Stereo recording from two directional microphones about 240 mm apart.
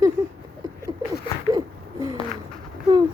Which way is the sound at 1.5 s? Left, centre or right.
Centre.